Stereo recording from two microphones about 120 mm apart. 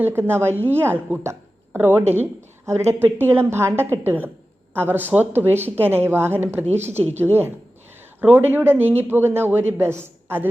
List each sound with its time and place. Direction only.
0.0 s a woman's voice: 20° right (ahead or behind)